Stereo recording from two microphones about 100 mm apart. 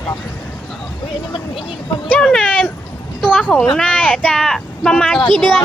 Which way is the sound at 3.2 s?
5° right (ahead or behind).